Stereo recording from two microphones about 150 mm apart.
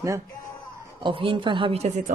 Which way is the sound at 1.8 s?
50° right (ahead or behind).